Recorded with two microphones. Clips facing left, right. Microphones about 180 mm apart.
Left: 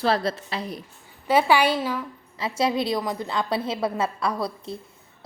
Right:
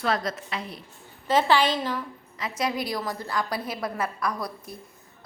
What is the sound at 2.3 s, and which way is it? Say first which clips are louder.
A woman's voice: left 5 dB; 30° left (ahead or behind).